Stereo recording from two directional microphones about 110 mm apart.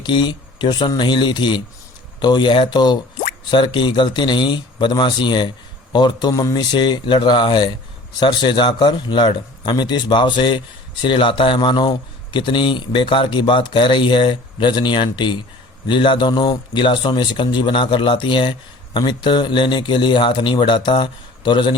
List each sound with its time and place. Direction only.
0.0 s speech: 45° left (ahead or behind)